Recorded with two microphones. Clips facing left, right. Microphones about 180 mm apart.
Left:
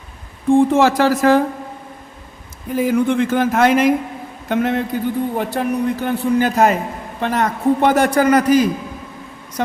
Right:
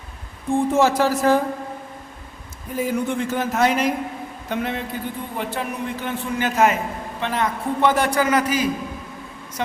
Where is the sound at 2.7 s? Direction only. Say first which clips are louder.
Left 7 dB; 90° left.